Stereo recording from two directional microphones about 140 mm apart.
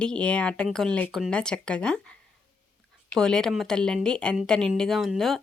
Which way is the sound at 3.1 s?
5° left (ahead or behind).